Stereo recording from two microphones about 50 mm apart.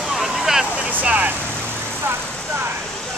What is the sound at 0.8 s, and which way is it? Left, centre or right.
Vehicle, right.